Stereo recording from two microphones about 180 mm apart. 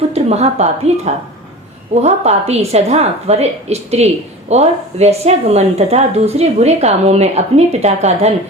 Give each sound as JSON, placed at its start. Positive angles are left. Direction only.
{"t": 0.1, "sound": "a woman's voice", "side_deg": -35}